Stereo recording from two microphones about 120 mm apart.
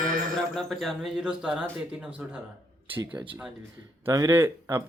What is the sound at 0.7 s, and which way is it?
Speech, centre (ahead or behind).